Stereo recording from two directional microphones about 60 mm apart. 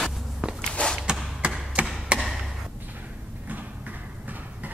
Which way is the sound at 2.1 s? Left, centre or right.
Centre.